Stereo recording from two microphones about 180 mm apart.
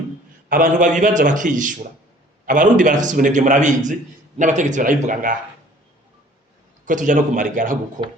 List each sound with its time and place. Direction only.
0.4 s a man's voice: 50° right (ahead or behind)
6.8 s a man's voice: 45° right (ahead or behind)